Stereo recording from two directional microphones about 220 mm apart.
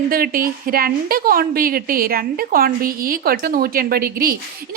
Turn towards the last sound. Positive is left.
turn(degrees=-45)  # may be behind; listen again after turning